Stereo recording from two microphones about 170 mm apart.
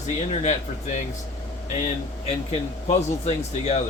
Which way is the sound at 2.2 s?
40° left (ahead or behind).